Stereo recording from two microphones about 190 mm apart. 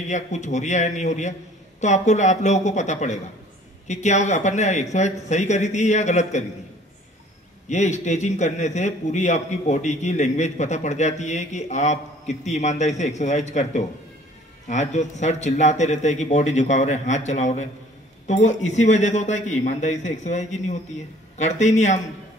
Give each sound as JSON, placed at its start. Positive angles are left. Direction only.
{"t": 0.0, "sound": "a man's voice", "side_deg": 40}
{"t": 7.7, "sound": "a man's voice", "side_deg": 40}